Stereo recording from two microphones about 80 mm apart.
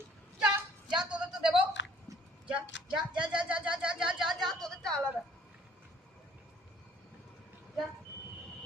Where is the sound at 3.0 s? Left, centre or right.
Centre.